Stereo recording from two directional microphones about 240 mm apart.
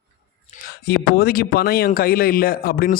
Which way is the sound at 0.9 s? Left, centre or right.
Left.